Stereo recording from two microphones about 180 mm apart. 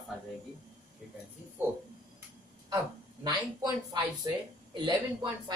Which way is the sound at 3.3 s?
25° right (ahead or behind).